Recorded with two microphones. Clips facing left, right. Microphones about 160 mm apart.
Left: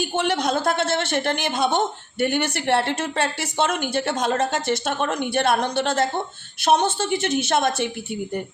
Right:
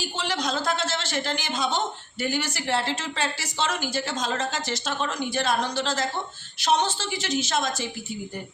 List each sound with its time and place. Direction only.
0.0 s a man's voice: 55° left (ahead or behind)